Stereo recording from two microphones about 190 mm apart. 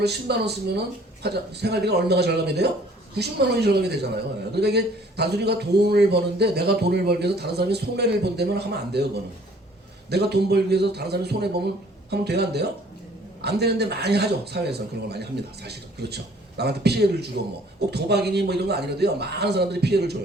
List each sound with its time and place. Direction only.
0.0 s a man's voice: 60° right (ahead or behind)
10.1 s a man's voice: 60° right (ahead or behind)